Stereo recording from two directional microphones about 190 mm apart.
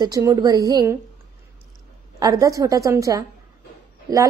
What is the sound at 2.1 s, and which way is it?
A woman's voice, 20° right (ahead or behind).